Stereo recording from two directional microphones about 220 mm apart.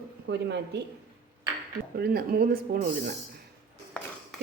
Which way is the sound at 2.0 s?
45° right (ahead or behind).